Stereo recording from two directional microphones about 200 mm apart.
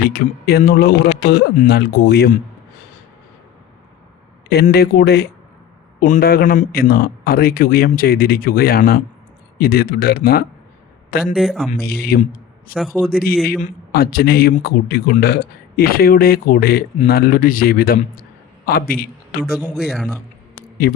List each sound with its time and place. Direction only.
0.0 s speech: 50° left (ahead or behind)
4.7 s speech: 50° left (ahead or behind)
11.3 s a man's voice: centre (ahead or behind)
11.8 s speech: 50° left (ahead or behind)
12.7 s a man's voice: centre (ahead or behind)
13.1 s a man's voice: 50° left (ahead or behind)
19.5 s a man's voice: 5° right (ahead or behind)
20.8 s speech: 50° left (ahead or behind)